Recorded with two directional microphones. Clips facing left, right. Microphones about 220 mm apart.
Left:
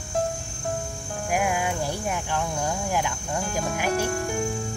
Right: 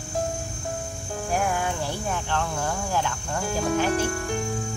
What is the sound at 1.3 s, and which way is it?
Speech, 10° left (ahead or behind).